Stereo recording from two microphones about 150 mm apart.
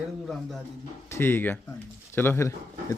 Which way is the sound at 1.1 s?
15° left (ahead or behind).